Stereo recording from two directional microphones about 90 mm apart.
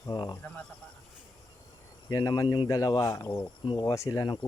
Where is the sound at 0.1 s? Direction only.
50° left (ahead or behind).